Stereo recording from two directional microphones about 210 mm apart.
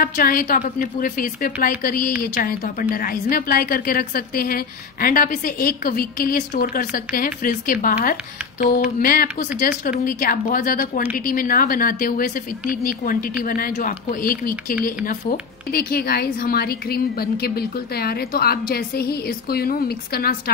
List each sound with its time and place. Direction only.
0.0 s a woman's voice: 45° left (ahead or behind)